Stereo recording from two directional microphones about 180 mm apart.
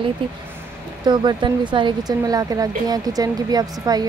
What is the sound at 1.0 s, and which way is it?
A woman's voice, 25° right (ahead or behind).